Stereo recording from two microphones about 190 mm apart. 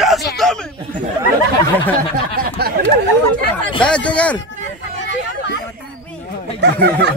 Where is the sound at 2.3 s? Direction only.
50° right (ahead or behind).